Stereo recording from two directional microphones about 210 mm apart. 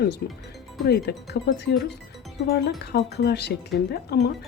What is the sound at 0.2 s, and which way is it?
Speech, 50° left (ahead or behind).